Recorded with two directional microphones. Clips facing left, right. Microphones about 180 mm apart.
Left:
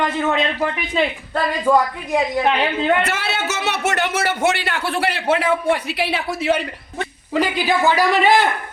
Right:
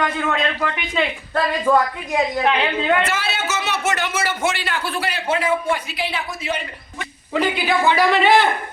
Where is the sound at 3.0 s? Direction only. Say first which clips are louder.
Left 1 dB; 65° left (ahead or behind).